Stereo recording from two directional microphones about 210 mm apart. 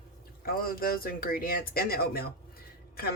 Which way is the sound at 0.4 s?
45° left (ahead or behind).